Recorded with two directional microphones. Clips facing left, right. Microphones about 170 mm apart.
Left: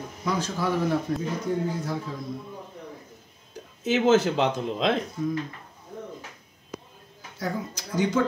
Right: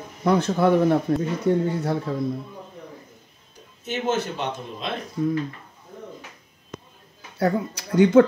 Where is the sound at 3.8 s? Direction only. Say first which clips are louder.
Left 5 dB; 90° left.